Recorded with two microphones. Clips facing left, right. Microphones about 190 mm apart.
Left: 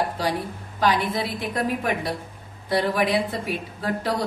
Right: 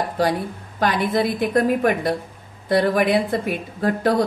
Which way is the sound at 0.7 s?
55° right (ahead or behind).